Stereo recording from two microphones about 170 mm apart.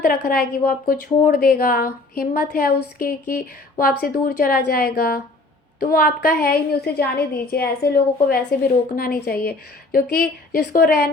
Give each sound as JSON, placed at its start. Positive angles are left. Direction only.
{"t": 0.0, "sound": "a woman's voice", "side_deg": 70}